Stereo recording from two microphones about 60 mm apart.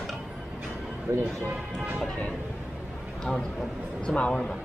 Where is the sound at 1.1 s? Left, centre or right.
Right.